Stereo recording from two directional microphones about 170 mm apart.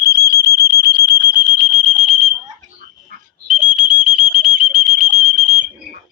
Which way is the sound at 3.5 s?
5° right (ahead or behind).